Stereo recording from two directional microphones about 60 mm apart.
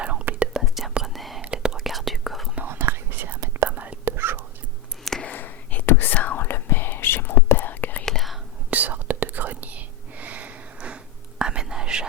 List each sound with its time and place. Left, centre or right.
0.0 s whispering: centre
0.5 s whispering: centre
2.6 s whispering: right
3.7 s whispering: right
4.0 s whispering: right
5.3 s whispering: left
8.0 s whispering: centre
8.7 s whispering: right